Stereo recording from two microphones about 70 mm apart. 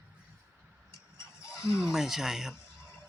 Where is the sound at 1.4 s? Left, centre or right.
Left.